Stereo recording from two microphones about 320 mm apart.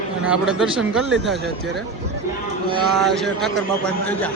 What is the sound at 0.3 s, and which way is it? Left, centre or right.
Speech, centre.